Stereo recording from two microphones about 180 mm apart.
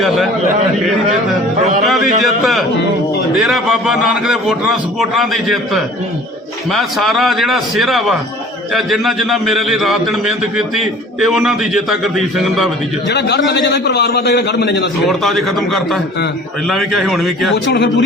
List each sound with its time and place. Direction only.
1.8 s a man's voice: centre (ahead or behind)
13.1 s a man's voice: 70° left (ahead or behind)
15.0 s a man's voice: centre (ahead or behind)